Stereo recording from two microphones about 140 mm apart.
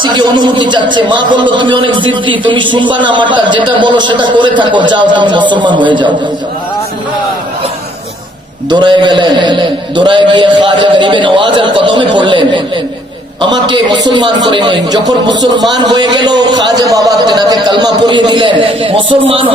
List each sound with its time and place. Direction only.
0.0 s a man's voice: 30° right (ahead or behind)
8.7 s a man's voice: 35° right (ahead or behind)